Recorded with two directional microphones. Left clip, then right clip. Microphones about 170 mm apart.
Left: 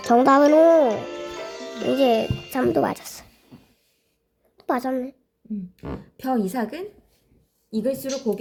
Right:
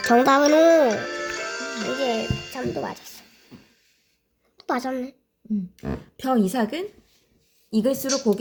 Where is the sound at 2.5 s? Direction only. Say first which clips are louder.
Left 10 dB; 70° left (ahead or behind); by 3.2 s 55° left (ahead or behind).